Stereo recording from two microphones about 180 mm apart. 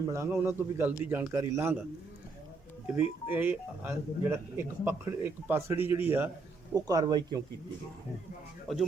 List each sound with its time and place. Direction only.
0.1 s speech: 10° right (ahead or behind)
2.8 s speech: 10° right (ahead or behind)